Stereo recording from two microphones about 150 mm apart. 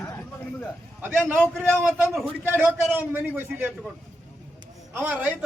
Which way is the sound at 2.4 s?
15° right (ahead or behind).